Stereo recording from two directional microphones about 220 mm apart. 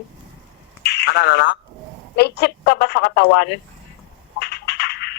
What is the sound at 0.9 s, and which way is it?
Speech, 45° left (ahead or behind).